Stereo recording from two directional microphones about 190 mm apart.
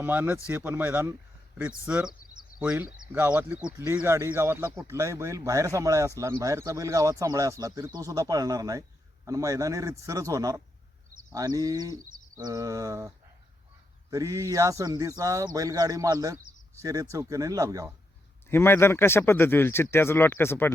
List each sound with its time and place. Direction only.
0.0 s speech: 10° right (ahead or behind)
18.4 s speech: 10° left (ahead or behind)